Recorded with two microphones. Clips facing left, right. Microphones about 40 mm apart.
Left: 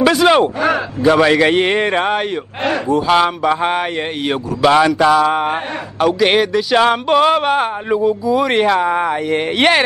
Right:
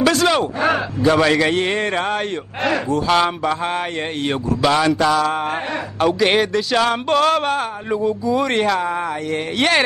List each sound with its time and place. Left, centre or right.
0.0 s speech: centre
1.5 s speech: left
3.1 s speech: centre
5.9 s a man's voice: centre; by 9.8 s left